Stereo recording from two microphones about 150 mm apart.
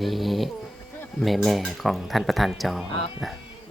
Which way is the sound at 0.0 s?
Centre (ahead or behind).